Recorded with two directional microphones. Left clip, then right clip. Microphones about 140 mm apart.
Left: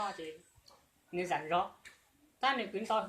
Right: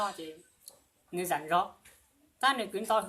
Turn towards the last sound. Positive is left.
turn(degrees=-35)  # may be behind; listen again after turning